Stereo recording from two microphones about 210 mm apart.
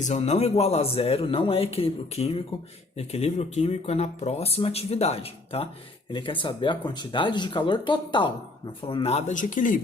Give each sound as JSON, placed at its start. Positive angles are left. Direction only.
{"t": 0.0, "sound": "speech", "side_deg": 35}